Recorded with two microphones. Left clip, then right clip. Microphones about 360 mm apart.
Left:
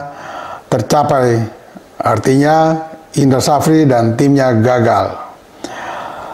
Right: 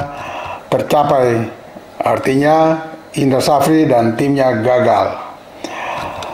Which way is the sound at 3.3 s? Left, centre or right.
Left.